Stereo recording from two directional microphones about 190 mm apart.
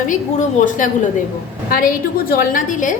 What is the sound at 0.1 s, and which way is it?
Speech, 45° left (ahead or behind).